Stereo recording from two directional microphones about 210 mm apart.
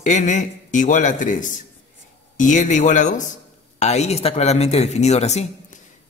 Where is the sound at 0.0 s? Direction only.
35° left (ahead or behind).